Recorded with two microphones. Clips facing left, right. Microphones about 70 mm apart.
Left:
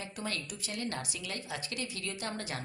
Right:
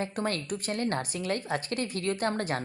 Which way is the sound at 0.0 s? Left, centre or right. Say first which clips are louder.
Right 8 dB; right.